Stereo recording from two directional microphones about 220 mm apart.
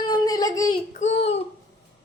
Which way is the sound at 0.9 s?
30° left (ahead or behind).